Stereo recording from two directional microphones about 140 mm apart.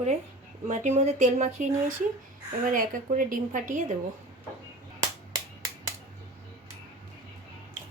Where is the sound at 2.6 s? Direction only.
80° right; by 3.9 s 65° right (ahead or behind).